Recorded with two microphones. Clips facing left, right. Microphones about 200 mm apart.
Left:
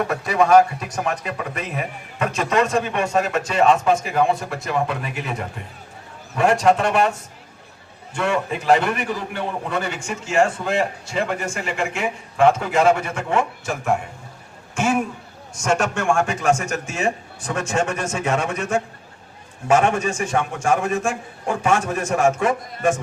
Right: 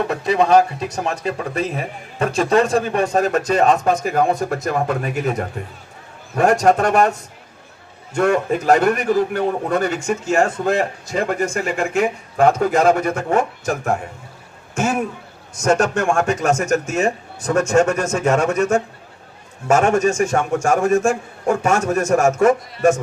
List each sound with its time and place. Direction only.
0.1 s a man's voice: 25° right (ahead or behind); by 7.1 s 40° right (ahead or behind)
8.1 s a man's voice: 45° right (ahead or behind)